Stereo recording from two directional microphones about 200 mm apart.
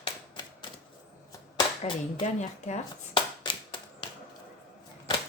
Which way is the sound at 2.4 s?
35° left (ahead or behind).